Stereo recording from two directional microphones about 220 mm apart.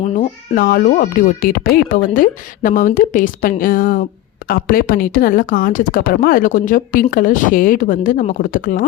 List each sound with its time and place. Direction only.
0.5 s speech: 40° left (ahead or behind)